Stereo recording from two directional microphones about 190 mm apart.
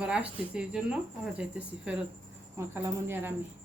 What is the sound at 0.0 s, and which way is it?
Speech, 5° right (ahead or behind).